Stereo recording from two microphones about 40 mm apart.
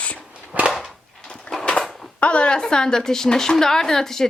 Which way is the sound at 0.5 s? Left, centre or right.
Right.